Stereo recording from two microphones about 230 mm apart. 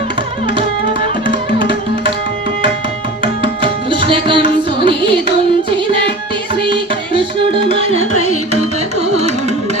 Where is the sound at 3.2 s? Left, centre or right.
Right.